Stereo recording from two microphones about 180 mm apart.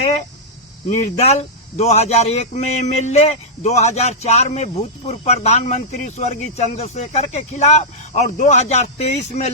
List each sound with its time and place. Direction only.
0.9 s speech: 35° left (ahead or behind)